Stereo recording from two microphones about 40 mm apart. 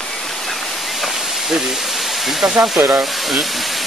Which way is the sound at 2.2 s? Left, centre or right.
Centre.